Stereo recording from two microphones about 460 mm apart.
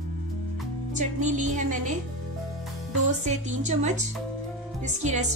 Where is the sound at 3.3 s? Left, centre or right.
Centre.